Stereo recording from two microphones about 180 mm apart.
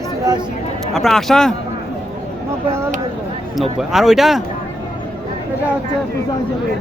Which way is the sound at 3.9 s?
Centre (ahead or behind).